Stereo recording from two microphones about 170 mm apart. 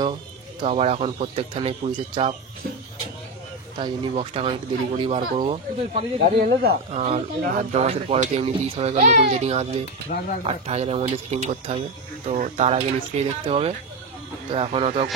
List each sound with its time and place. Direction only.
0.6 s speech: 35° right (ahead or behind)
3.8 s speech: 30° right (ahead or behind)
10.1 s speech: 50° left (ahead or behind)
10.4 s speech: 40° right (ahead or behind)